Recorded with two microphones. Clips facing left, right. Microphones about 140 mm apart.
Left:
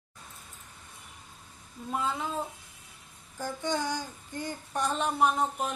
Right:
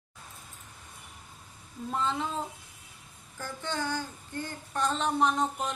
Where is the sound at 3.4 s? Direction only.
15° left (ahead or behind).